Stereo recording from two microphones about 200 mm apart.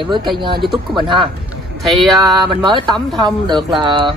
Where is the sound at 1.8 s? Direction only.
Centre (ahead or behind).